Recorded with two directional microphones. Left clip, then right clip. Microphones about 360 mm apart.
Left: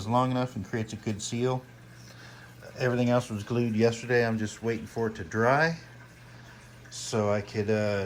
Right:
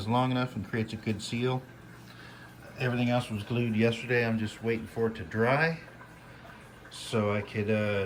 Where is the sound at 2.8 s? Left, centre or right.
Centre.